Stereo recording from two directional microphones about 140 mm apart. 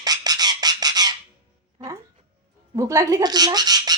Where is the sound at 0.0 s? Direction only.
30° right (ahead or behind).